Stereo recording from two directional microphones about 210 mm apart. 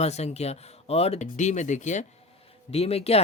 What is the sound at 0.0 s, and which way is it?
Speech, 30° left (ahead or behind).